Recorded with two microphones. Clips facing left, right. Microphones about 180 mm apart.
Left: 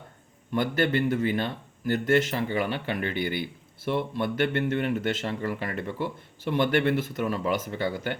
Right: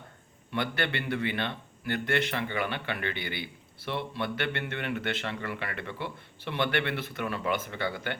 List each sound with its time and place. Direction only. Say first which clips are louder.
0.5 s a man's voice: left 6 dB; 45° left (ahead or behind)